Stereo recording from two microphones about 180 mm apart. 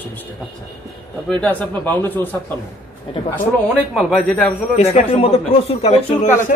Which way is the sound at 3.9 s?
5° right (ahead or behind).